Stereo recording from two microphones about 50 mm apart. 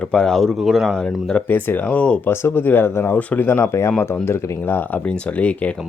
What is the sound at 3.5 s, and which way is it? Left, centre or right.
Speech, left.